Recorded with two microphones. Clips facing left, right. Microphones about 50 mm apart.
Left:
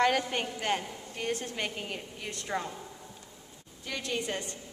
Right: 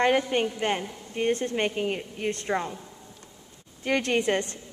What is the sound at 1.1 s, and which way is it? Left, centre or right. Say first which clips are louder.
A woman's voice: right 9 dB; right.